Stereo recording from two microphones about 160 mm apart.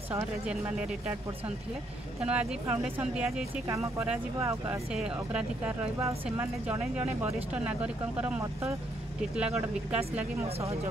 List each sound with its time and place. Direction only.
0.5 s speech: 5° right (ahead or behind)
2.2 s speech: 10° right (ahead or behind)
3.6 s speech: 20° right (ahead or behind)
4.9 s speech: 5° right (ahead or behind)